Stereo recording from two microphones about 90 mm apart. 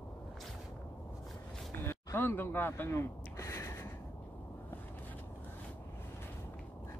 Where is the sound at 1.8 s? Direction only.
25° left (ahead or behind).